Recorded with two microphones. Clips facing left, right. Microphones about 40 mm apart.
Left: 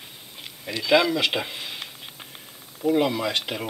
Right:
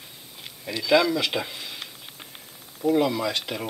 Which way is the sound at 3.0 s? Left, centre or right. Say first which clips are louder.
Left 1 dB; left.